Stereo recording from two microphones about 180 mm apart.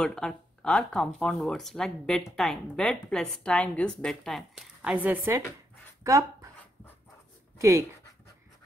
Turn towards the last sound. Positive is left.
turn(degrees=-15)  # may be behind; listen again after turning